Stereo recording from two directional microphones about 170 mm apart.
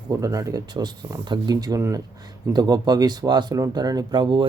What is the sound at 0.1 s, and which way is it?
Speech, 20° right (ahead or behind).